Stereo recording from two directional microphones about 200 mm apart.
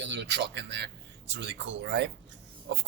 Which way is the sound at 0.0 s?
60° right (ahead or behind).